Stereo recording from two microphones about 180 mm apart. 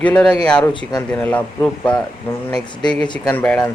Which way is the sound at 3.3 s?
10° left (ahead or behind).